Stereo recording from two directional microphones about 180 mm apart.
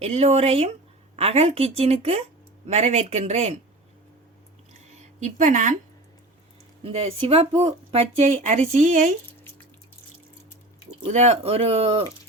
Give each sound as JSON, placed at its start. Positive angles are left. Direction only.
{"t": 0.0, "sound": "speech", "side_deg": -35}
{"t": 5.2, "sound": "speech", "side_deg": -45}
{"t": 6.8, "sound": "speech", "side_deg": -35}
{"t": 11.0, "sound": "speech", "side_deg": -40}